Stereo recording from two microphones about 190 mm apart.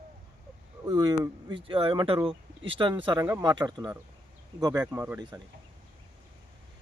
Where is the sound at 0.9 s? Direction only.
20° right (ahead or behind).